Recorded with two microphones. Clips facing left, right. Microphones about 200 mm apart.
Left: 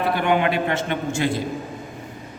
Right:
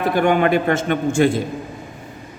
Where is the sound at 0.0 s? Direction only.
45° right (ahead or behind).